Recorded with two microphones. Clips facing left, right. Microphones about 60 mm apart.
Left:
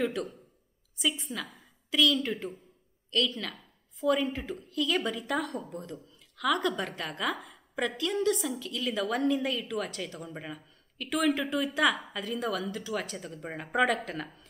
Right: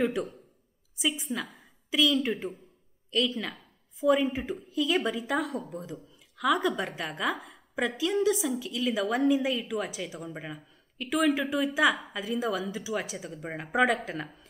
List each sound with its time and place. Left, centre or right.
0.0 s a woman's voice: centre